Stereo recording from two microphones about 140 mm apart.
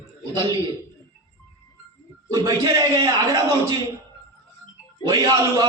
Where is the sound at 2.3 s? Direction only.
30° right (ahead or behind).